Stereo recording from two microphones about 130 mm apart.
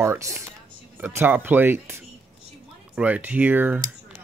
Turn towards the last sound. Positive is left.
turn(degrees=-15)  # may be behind; listen again after turning